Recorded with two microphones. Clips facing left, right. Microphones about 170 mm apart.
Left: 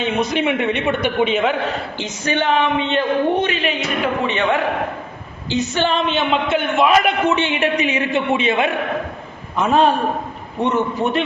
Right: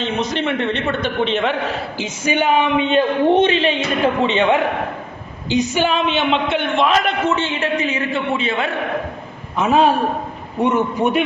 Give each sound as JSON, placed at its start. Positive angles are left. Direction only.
{"t": 0.0, "sound": "a man's voice", "side_deg": 10}
{"t": 2.0, "sound": "a man's voice", "side_deg": -10}
{"t": 9.6, "sound": "a man's voice", "side_deg": -5}